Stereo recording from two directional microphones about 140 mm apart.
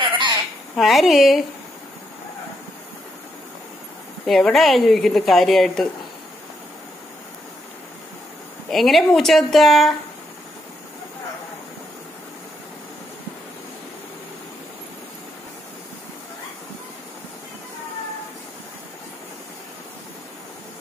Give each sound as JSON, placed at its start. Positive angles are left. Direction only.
{"t": 0.0, "sound": "a sound", "side_deg": -35}
{"t": 0.7, "sound": "speech", "side_deg": 0}
{"t": 4.3, "sound": "speech", "side_deg": 0}
{"t": 8.6, "sound": "speech", "side_deg": 0}